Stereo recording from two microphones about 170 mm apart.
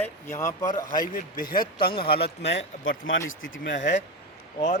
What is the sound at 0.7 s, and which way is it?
Speech, 25° left (ahead or behind).